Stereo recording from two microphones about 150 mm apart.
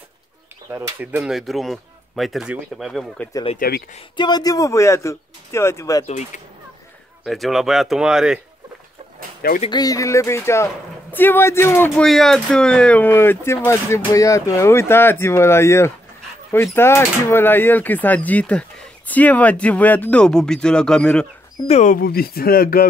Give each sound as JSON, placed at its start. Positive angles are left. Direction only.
{"t": 0.7, "sound": "speech", "side_deg": -15}
{"t": 1.3, "sound": "speech", "side_deg": 0}
{"t": 3.5, "sound": "speech", "side_deg": 85}
{"t": 4.2, "sound": "a man's voice", "side_deg": 25}
{"t": 6.0, "sound": "speech", "side_deg": 50}
{"t": 7.2, "sound": "speech", "side_deg": 0}
{"t": 9.7, "sound": "speech", "side_deg": 25}
{"t": 12.0, "sound": "speech", "side_deg": 0}
{"t": 21.6, "sound": "speech", "side_deg": 50}
{"t": 21.9, "sound": "speech", "side_deg": 85}